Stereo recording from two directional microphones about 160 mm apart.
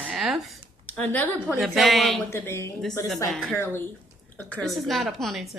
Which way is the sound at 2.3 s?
15° left (ahead or behind).